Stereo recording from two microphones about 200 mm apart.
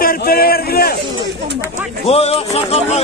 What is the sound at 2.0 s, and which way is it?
Music, 30° left (ahead or behind).